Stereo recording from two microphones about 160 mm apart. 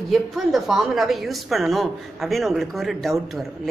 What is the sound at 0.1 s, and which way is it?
A woman's voice, centre (ahead or behind).